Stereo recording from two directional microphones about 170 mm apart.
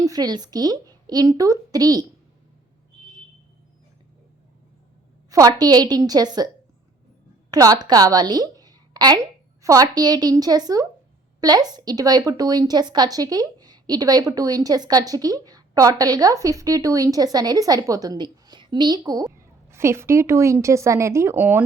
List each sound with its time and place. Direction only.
0.0 s a woman's voice: 20° right (ahead or behind)
5.3 s a woman's voice: 20° right (ahead or behind)
7.5 s a woman's voice: 20° right (ahead or behind)